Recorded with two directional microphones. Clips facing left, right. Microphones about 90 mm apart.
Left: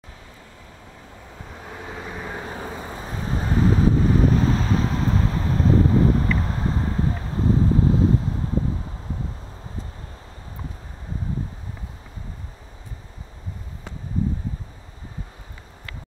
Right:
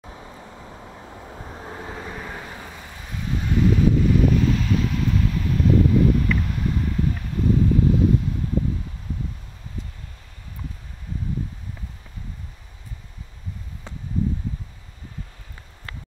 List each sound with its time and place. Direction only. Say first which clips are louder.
1.3 s vehicle: right 1 dB; 25° right (ahead or behind)
1.9 s vehicle: left 4 dB; 15° left (ahead or behind)
2.4 s vehicle: left 6 dB; 30° left (ahead or behind)